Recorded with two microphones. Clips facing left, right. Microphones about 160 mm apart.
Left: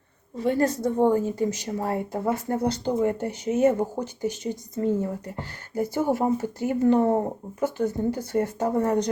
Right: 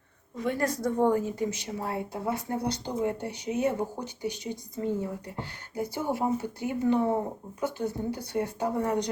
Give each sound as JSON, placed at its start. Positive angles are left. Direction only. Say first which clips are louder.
{"t": 0.3, "sound": "a woman's voice", "louder": "left 6 dB", "side_deg": 30}